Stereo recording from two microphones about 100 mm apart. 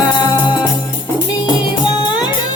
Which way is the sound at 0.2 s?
50° left (ahead or behind).